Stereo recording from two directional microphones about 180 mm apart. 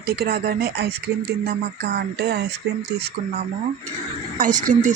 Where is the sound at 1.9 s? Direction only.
65° right (ahead or behind).